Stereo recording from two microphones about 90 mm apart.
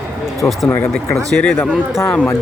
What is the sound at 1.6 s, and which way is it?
Speech, 30° left (ahead or behind).